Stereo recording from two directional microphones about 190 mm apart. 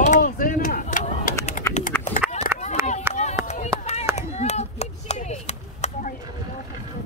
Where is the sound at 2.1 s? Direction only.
35° left (ahead or behind).